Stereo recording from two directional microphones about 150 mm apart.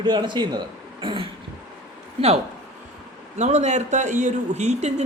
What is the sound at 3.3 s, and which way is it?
A man's voice, 50° right (ahead or behind).